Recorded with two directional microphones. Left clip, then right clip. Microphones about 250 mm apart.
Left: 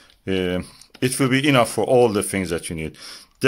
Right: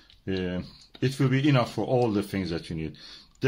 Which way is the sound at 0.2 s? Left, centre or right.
Left.